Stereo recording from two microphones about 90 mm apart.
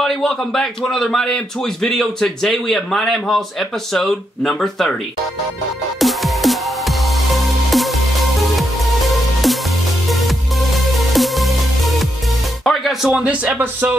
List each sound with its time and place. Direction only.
0.0 s a man's voice: 5° left (ahead or behind)
5.9 s music: centre (ahead or behind)
13.1 s speech: 15° right (ahead or behind)